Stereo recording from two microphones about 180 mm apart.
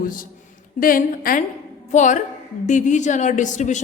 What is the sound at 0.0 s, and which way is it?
A woman's voice, 50° left (ahead or behind).